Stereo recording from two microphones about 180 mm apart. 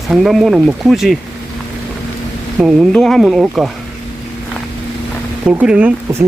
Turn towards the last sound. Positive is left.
turn(degrees=-10)  # may be behind; listen again after turning